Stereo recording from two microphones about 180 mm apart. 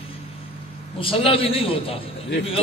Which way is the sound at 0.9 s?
30° left (ahead or behind).